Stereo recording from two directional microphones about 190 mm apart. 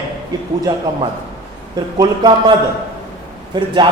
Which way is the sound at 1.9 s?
20° right (ahead or behind).